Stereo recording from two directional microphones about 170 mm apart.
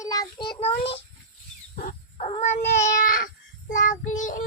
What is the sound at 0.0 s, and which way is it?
Child singing, 20° left (ahead or behind).